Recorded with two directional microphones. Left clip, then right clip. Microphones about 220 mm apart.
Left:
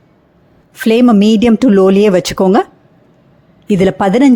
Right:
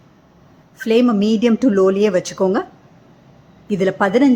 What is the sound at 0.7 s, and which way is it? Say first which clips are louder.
A woman's voice: left 6 dB; 40° left (ahead or behind).